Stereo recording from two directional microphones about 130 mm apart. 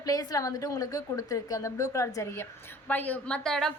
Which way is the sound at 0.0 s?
30° left (ahead or behind).